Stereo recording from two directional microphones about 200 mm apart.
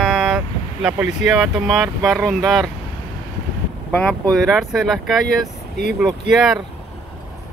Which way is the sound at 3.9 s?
5° left (ahead or behind).